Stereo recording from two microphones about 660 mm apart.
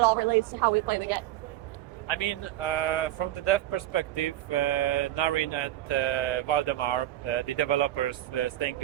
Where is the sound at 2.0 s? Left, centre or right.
Left.